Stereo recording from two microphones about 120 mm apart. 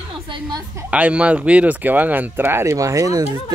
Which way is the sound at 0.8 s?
10° right (ahead or behind).